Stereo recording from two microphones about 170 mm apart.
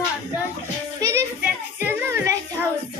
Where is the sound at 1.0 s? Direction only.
15° right (ahead or behind).